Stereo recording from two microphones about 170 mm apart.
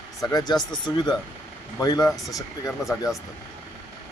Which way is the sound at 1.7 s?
20° left (ahead or behind).